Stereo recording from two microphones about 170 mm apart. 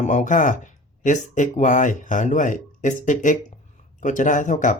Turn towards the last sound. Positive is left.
turn(degrees=50)  # may be behind; listen again after turning